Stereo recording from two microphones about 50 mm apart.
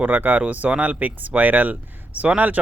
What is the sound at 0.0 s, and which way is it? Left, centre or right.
Speech, right.